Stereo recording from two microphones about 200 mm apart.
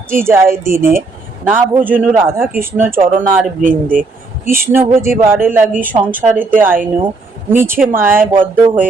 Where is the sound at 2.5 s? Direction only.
10° right (ahead or behind).